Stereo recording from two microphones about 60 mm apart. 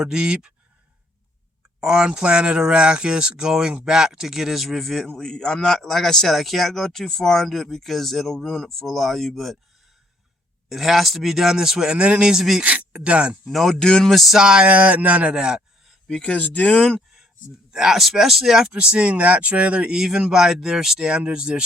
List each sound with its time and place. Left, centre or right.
0.0 s speech: centre
1.8 s a man's voice: centre
10.7 s speech: centre
12.6 s speech: right
13.5 s a man's voice: centre
14.3 s speech: centre
14.7 s speech: right
16.0 s speech: centre
16.4 s speech: left
17.7 s speech: centre
20.0 s speech: centre